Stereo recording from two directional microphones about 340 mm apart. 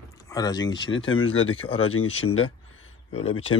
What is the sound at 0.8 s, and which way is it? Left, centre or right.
Speech, left.